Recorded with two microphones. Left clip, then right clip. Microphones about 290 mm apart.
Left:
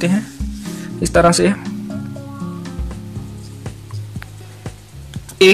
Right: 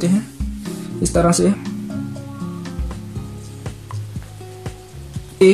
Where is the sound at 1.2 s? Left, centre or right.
Left.